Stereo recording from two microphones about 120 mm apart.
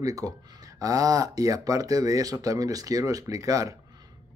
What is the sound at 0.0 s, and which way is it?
Speech, 30° right (ahead or behind).